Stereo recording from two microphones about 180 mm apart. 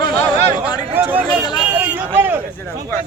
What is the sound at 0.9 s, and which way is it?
Speech, 10° right (ahead or behind).